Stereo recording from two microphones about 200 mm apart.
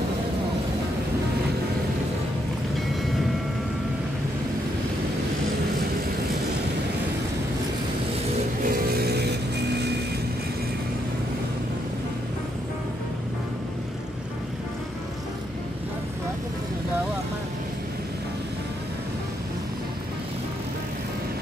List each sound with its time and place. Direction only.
8.6 s vehicle: 50° right (ahead or behind)